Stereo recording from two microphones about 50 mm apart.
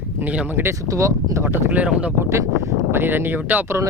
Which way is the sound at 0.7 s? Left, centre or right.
Right.